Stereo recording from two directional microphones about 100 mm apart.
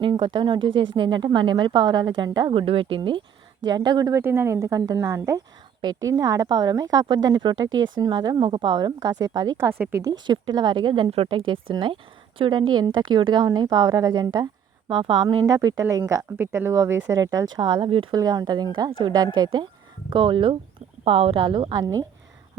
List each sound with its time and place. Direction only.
0.0 s a woman's voice: 55° right (ahead or behind)
2.5 s a woman's voice: 65° right (ahead or behind); by 4.1 s 40° right (ahead or behind)
4.1 s speech: 25° right (ahead or behind)
5.8 s speech: 40° right (ahead or behind)
10.2 s a woman's voice: 50° right (ahead or behind)
11.1 s a woman's voice: 70° right (ahead or behind)
15.4 s speech: 35° right (ahead or behind)
16.4 s a woman's voice: 25° right (ahead or behind); by 18.1 s 60° right (ahead or behind)
18.1 s a woman's voice: 40° right (ahead or behind); by 20.6 s 60° right (ahead or behind)
21.0 s speech: 75° right (ahead or behind); by 21.8 s 50° right (ahead or behind)